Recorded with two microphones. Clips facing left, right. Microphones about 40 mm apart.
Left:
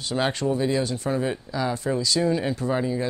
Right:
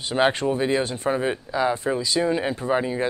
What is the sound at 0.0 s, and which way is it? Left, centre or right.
Speech, right.